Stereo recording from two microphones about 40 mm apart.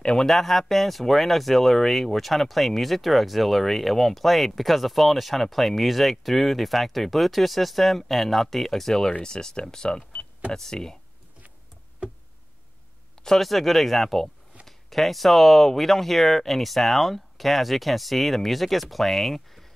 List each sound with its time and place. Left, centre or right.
0.0 s speech: centre
0.3 s speech: centre
13.2 s speech: centre